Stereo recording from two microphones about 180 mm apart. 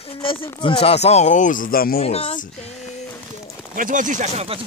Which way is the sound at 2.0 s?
35° left (ahead or behind).